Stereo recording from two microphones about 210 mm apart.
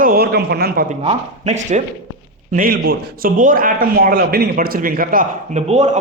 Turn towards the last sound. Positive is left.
turn(degrees=-30)  # may be behind; listen again after turning